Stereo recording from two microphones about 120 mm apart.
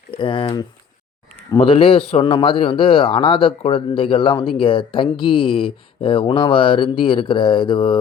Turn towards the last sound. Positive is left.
turn(degrees=45)  # may be behind; listen again after turning